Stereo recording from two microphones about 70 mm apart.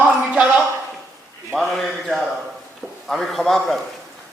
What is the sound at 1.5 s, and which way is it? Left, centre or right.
A man's voice, centre.